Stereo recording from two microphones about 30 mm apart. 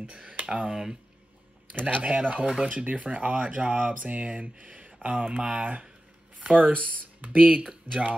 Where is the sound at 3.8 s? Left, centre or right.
Right.